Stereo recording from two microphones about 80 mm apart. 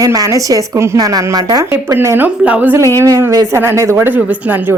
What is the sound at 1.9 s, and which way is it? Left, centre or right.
Speech, right.